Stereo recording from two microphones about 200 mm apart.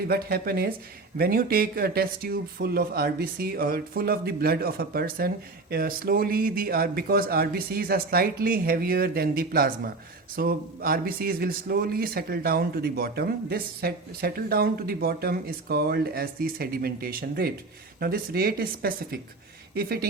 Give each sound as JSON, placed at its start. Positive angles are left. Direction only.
{"t": 0.1, "sound": "speech", "side_deg": -50}